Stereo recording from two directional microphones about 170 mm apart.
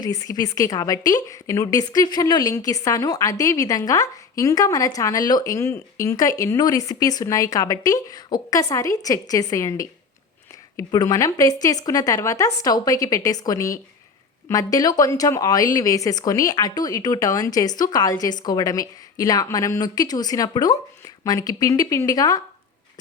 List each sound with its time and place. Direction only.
0.0 s a woman's voice: 20° left (ahead or behind)